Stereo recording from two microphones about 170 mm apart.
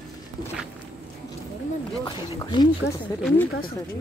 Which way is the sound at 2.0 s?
25° left (ahead or behind).